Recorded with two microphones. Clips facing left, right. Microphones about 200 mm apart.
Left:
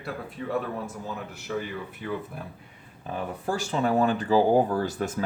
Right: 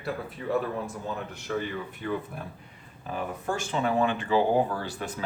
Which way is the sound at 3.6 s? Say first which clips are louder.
Left 2 dB; 40° left (ahead or behind).